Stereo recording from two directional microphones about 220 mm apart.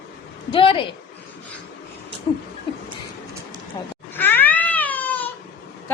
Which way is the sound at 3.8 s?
20° left (ahead or behind).